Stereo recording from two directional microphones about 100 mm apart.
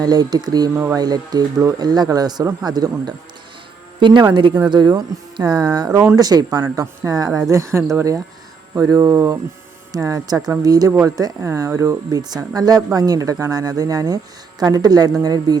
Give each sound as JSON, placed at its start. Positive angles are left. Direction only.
{"t": 0.0, "sound": "speech", "side_deg": -40}
{"t": 7.5, "sound": "speech", "side_deg": -25}